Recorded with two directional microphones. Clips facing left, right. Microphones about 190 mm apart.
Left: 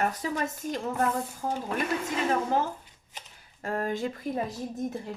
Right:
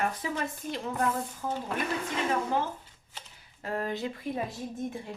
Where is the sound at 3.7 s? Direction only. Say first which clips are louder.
Left 2 dB; 45° left (ahead or behind).